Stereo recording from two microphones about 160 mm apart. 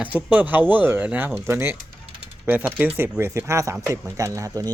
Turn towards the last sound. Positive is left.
turn(degrees=-20)  # may be behind; listen again after turning